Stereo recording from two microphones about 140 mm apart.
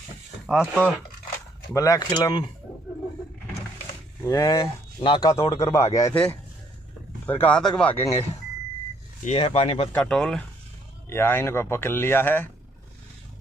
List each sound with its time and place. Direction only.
0.5 s speech: 5° left (ahead or behind)
1.7 s speech: 25° left (ahead or behind)
2.0 s speech: 35° left (ahead or behind)
3.7 s a sound: 20° left (ahead or behind)
5.3 s speech: 25° left (ahead or behind)
7.2 s speech: 10° left (ahead or behind)
9.2 s speech: 50° left (ahead or behind)
9.9 s speech: 5° left (ahead or behind)
11.1 s speech: 15° left (ahead or behind)